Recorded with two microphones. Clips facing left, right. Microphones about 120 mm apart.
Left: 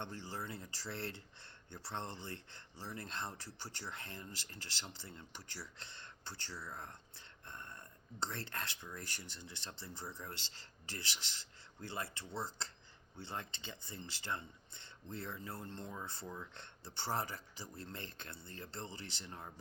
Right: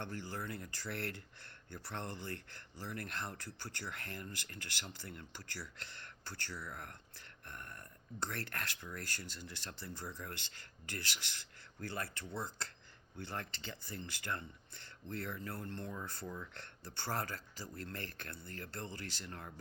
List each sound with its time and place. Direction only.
0.0 s speech: 25° left (ahead or behind)